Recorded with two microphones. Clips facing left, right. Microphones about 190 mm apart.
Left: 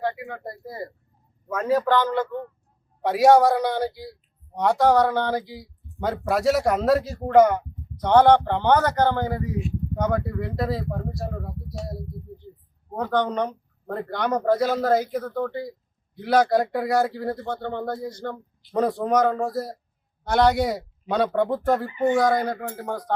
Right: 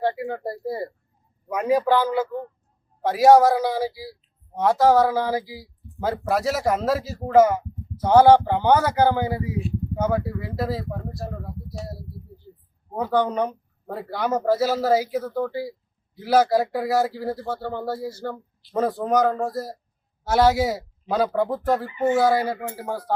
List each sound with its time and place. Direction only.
0.0 s speech: 30° right (ahead or behind)
1.5 s a man's voice: 15° right (ahead or behind)